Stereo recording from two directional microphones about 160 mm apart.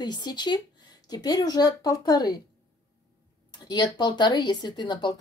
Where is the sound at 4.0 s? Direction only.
30° left (ahead or behind).